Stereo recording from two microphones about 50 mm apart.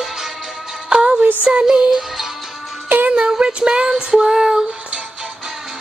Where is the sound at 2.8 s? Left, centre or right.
Right.